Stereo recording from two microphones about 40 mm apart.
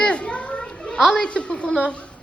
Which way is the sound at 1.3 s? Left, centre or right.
Left.